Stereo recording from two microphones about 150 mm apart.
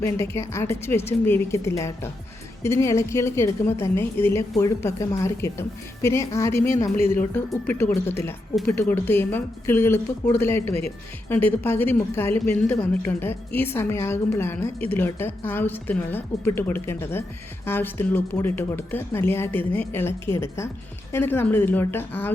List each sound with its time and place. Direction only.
0.0 s a woman's voice: 20° left (ahead or behind)